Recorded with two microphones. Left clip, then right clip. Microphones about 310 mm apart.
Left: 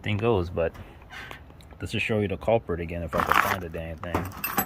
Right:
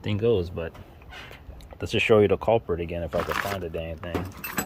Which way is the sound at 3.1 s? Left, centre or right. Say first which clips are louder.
Left 6 dB; centre.